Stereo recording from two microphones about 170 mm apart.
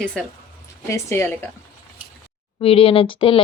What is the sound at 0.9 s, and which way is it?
Speech, 15° left (ahead or behind).